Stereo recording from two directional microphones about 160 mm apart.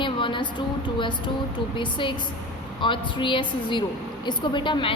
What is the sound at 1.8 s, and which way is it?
A woman's voice, 30° left (ahead or behind).